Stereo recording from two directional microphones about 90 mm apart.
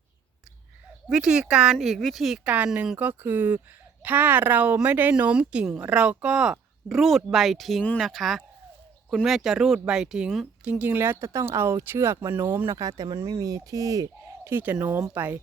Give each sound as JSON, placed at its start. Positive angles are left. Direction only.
{"t": 1.1, "sound": "speech", "side_deg": -10}
{"t": 2.4, "sound": "speech", "side_deg": -15}
{"t": 10.6, "sound": "speech", "side_deg": -15}
{"t": 13.1, "sound": "speech", "side_deg": -35}
{"t": 14.4, "sound": "speech", "side_deg": -25}